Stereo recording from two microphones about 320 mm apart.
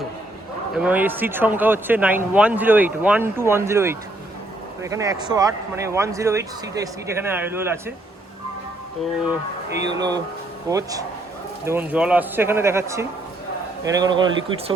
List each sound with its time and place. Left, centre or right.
0.8 s speech: centre
9.6 s speech: right
10.0 s speech: centre